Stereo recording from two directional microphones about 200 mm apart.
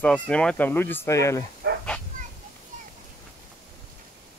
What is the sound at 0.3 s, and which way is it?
Speech, 5° left (ahead or behind).